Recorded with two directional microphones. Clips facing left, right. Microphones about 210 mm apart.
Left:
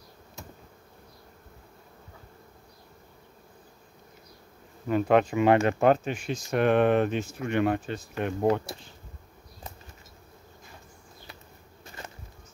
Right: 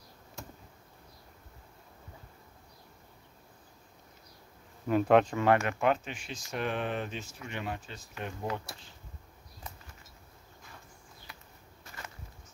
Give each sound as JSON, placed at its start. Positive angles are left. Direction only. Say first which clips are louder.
{"t": 4.8, "sound": "speech", "louder": "left 1 dB", "side_deg": 0}
{"t": 5.3, "sound": "speech", "louder": "left 5 dB", "side_deg": 20}
{"t": 5.6, "sound": "speech", "louder": "left 7 dB", "side_deg": 35}
{"t": 11.8, "sound": "a sound", "louder": "left 4 dB", "side_deg": 25}